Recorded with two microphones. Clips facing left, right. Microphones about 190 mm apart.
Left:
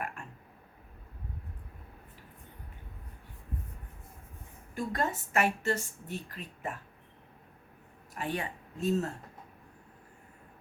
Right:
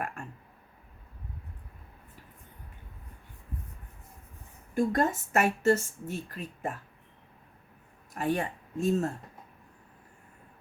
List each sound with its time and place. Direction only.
4.7 s a woman's voice: 45° right (ahead or behind)
8.1 s speech: 45° right (ahead or behind)